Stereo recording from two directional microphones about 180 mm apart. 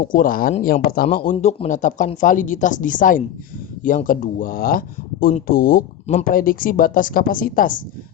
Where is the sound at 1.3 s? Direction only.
40° left (ahead or behind).